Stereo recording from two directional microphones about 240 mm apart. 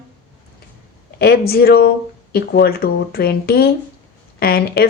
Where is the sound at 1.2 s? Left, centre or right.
Left.